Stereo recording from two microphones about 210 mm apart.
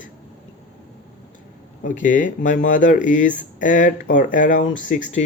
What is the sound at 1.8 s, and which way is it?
Speech, 40° left (ahead or behind).